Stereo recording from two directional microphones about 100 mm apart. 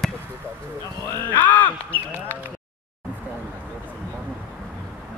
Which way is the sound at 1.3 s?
15° left (ahead or behind).